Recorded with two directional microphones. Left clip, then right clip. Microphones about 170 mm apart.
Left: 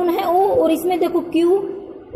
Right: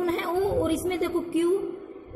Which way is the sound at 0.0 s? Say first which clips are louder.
Left 10 dB; 20° left (ahead or behind).